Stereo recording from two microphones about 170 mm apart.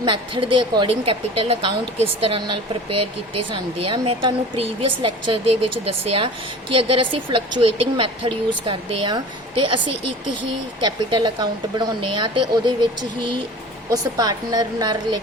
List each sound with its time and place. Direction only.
0.0 s speech: 30° right (ahead or behind)
13.9 s speech: 20° right (ahead or behind)